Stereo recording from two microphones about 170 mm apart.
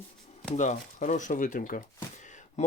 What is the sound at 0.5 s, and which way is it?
Speech, 45° left (ahead or behind).